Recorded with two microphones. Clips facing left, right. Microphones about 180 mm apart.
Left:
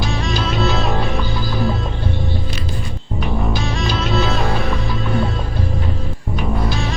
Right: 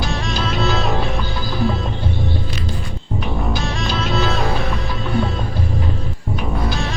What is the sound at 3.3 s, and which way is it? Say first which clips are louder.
Music: left 3 dB; centre (ahead or behind).